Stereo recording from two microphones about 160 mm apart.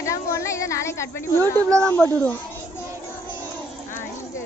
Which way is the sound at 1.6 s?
20° right (ahead or behind).